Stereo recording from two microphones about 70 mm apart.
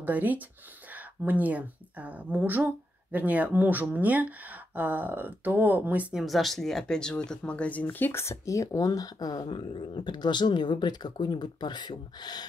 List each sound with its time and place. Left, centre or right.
0.0 s speech: right
6.1 s speech: centre
7.8 s speech: left